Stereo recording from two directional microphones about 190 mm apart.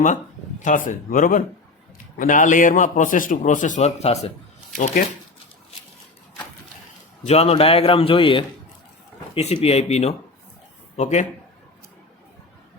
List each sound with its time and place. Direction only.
0.6 s a man's voice: 40° left (ahead or behind)
7.3 s a man's voice: 35° left (ahead or behind)